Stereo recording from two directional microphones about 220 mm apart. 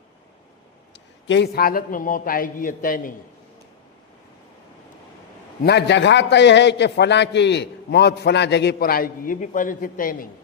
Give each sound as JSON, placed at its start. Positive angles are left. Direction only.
{"t": 0.9, "sound": "a man's voice", "side_deg": 55}
{"t": 5.6, "sound": "a man's voice", "side_deg": 50}